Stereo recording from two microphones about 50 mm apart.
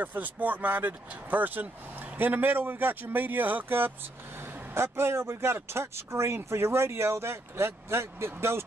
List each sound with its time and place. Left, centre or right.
0.0 s speech: right
4.7 s speech: right